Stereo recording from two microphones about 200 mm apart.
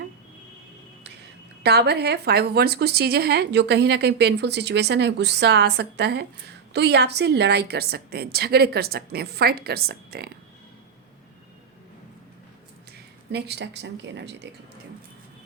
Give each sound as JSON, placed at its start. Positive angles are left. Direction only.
{"t": 1.6, "sound": "a woman's voice", "side_deg": -55}
{"t": 13.3, "sound": "a woman's voice", "side_deg": -55}